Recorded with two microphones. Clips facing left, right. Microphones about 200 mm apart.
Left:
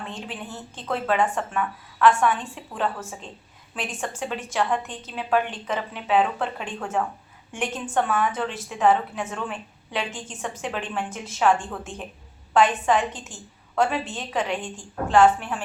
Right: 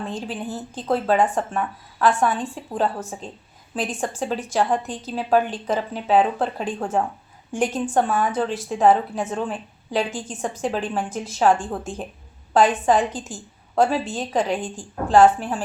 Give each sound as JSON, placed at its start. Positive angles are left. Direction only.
{"t": 0.0, "sound": "a woman's voice", "side_deg": -35}